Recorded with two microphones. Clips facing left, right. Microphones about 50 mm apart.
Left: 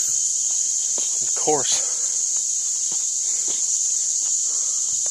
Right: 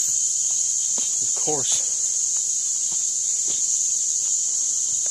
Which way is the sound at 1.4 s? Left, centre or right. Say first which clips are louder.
Left 6 dB; left.